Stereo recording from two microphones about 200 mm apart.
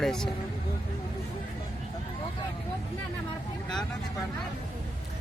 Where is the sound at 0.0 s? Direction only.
Centre (ahead or behind).